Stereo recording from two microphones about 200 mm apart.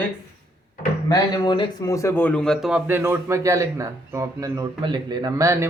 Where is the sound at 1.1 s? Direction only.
20° left (ahead or behind).